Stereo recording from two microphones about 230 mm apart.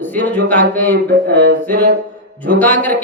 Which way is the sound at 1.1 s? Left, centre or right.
Right.